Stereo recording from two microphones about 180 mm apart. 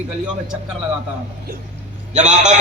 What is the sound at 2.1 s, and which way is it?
Speech, 40° right (ahead or behind).